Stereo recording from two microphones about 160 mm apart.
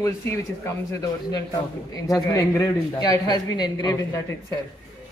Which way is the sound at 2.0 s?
20° left (ahead or behind).